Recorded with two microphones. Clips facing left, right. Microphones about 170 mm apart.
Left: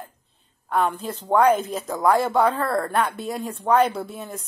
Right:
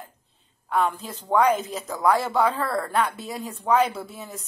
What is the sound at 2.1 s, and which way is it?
Speech, centre (ahead or behind).